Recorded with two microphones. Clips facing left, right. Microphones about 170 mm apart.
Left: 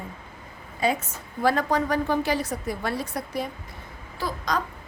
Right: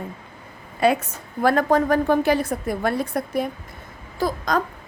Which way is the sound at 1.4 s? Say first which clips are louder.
Right 5 dB; 50° right (ahead or behind).